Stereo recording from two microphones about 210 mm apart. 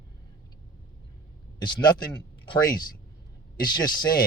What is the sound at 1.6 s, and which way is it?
Speech, 20° left (ahead or behind).